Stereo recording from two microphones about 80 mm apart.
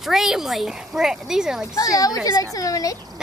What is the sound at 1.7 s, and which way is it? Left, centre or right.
A woman's voice, left.